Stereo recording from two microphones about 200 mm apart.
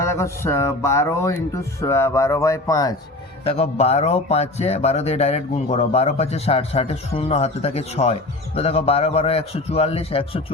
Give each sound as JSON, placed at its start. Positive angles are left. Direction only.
{"t": 0.0, "sound": "speech", "side_deg": 15}
{"t": 3.4, "sound": "speech", "side_deg": 30}